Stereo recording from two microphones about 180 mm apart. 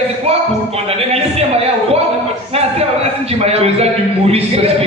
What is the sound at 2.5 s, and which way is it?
Speech, 35° right (ahead or behind).